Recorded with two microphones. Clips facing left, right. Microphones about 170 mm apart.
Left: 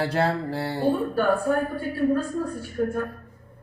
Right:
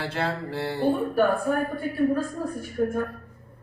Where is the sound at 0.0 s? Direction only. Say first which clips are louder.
Left 5 dB; 40° left (ahead or behind).